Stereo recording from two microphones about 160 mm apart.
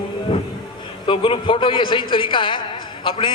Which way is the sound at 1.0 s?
35° left (ahead or behind).